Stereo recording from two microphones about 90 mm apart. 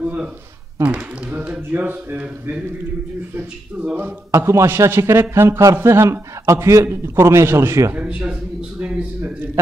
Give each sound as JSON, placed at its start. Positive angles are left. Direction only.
{"t": 0.0, "sound": "speech", "side_deg": -15}
{"t": 3.8, "sound": "speech", "side_deg": -20}
{"t": 4.3, "sound": "a man's voice", "side_deg": -30}
{"t": 7.9, "sound": "speech", "side_deg": -15}